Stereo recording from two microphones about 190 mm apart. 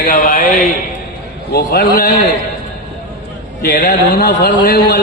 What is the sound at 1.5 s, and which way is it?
Speech, 55° left (ahead or behind).